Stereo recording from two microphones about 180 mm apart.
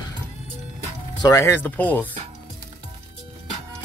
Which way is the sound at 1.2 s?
15° left (ahead or behind).